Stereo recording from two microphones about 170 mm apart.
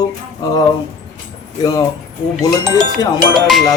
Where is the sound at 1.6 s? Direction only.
20° left (ahead or behind).